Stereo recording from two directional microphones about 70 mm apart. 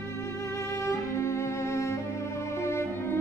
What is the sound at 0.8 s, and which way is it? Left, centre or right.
Cello, left.